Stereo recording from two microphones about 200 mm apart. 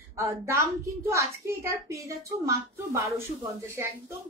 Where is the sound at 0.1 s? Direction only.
15° right (ahead or behind).